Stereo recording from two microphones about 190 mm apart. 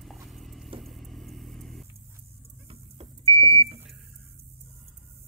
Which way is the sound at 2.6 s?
30° right (ahead or behind).